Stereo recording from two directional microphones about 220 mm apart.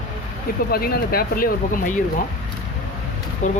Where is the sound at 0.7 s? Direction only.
45° left (ahead or behind).